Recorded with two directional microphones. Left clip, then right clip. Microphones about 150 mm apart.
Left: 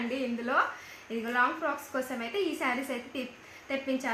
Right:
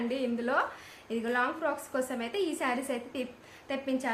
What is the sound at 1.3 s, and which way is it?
A woman's voice, 30° right (ahead or behind).